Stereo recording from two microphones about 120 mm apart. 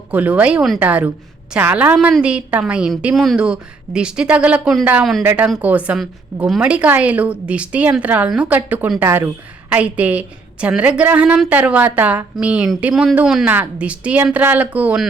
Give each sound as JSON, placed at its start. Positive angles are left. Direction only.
{"t": 0.1, "sound": "a woman's voice", "side_deg": -10}